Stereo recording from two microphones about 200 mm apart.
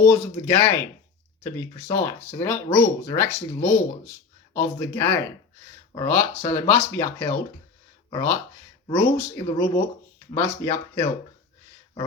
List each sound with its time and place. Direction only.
0.0 s speech: 15° left (ahead or behind)